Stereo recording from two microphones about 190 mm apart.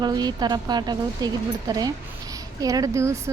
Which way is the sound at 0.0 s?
20° right (ahead or behind).